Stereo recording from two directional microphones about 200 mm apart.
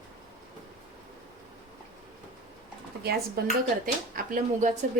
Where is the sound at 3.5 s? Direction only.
45° right (ahead or behind).